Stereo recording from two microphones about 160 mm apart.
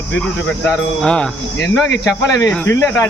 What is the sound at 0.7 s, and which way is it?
Speech, 5° left (ahead or behind).